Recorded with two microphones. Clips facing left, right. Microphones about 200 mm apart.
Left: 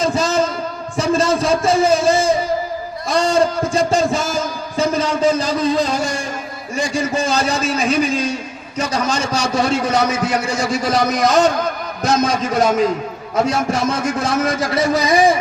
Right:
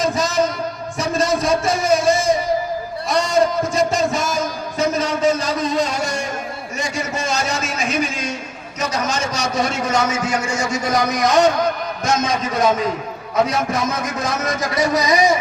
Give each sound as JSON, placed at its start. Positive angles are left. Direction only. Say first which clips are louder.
{"t": 0.0, "sound": "a sound", "louder": "left 2 dB", "side_deg": 30}
{"t": 0.9, "sound": "a man's voice", "louder": "left 4 dB", "side_deg": 30}
{"t": 4.1, "sound": "music", "louder": "left 1 dB", "side_deg": 30}
{"t": 6.7, "sound": "a man's voice", "louder": "left 6 dB", "side_deg": 30}